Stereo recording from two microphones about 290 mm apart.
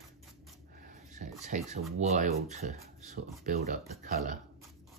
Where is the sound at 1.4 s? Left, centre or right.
Right.